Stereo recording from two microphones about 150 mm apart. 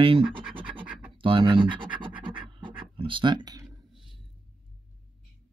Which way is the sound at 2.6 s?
35° right (ahead or behind).